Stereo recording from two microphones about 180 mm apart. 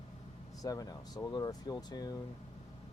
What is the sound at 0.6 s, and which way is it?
Speech, 20° left (ahead or behind).